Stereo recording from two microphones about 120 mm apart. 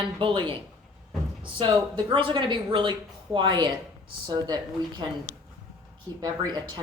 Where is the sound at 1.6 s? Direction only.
40° right (ahead or behind).